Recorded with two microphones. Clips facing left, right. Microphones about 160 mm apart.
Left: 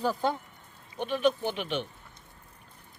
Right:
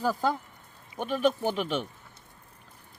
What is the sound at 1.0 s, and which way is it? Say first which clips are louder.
Speech: even; 45° right (ahead or behind).